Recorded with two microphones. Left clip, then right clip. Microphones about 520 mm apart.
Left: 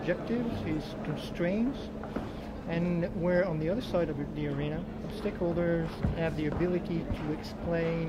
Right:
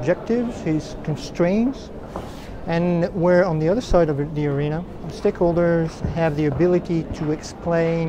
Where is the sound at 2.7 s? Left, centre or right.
Right.